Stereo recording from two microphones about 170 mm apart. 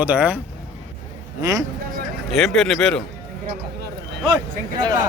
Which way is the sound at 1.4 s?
20° right (ahead or behind).